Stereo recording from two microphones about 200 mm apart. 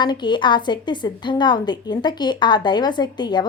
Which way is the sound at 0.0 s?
20° left (ahead or behind).